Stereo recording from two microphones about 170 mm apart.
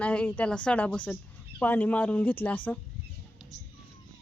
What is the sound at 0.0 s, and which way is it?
A woman's voice, 10° left (ahead or behind).